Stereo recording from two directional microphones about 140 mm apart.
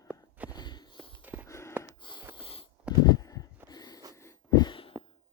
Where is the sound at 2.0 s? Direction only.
35° left (ahead or behind).